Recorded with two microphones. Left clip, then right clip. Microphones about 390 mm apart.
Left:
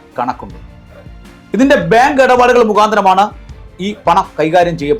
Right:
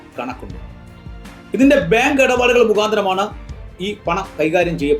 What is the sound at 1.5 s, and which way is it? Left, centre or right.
Speech, left.